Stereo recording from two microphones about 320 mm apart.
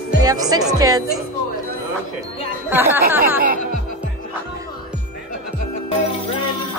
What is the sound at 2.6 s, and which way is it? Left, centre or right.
Chatter, centre.